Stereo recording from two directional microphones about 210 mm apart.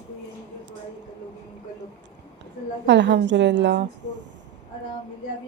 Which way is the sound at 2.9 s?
55° right (ahead or behind).